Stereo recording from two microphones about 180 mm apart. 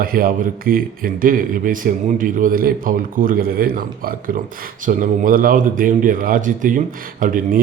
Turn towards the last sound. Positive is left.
turn(degrees=-50)  # may be behind; listen again after turning